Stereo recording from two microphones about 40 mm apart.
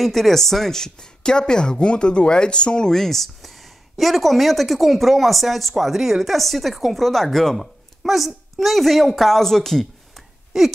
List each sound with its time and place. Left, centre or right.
0.0 s speech: centre; by 2.9 s left
2.9 s speech: centre
10.5 s a sound: centre